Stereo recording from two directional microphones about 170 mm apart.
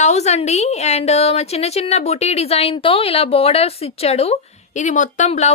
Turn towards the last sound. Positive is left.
turn(degrees=40)  # may be behind; listen again after turning